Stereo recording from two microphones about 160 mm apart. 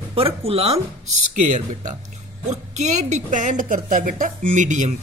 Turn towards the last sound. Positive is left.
turn(degrees=-50)  # may be behind; listen again after turning